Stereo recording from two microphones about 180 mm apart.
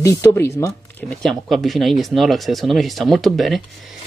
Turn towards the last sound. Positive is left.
turn(degrees=0)  # may be behind; listen again after turning